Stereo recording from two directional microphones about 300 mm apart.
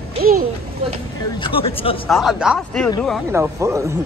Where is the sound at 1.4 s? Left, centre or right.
Centre.